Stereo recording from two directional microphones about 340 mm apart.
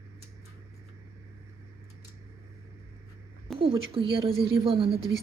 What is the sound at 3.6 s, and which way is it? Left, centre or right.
A woman's voice, centre.